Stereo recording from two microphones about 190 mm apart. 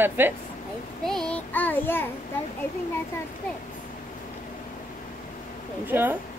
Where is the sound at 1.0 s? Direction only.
Centre (ahead or behind).